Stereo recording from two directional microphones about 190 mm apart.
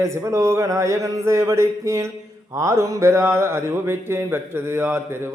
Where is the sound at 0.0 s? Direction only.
15° right (ahead or behind).